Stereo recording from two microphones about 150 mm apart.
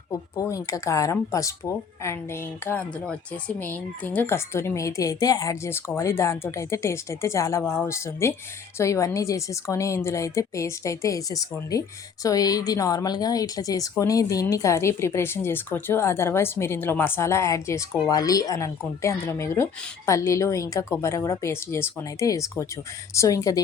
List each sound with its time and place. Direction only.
0.1 s speech: 20° left (ahead or behind)